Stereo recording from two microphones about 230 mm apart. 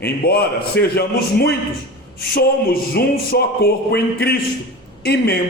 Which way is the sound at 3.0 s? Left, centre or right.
Left.